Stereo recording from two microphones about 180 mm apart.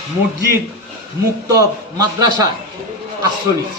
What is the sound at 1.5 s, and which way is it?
Speech, 20° right (ahead or behind).